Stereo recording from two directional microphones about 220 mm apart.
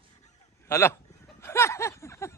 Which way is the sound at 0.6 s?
10° left (ahead or behind).